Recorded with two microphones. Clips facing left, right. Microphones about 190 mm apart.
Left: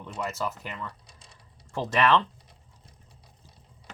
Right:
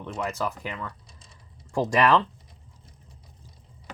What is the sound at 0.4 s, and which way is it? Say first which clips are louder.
Speech: right 2 dB; centre (ahead or behind).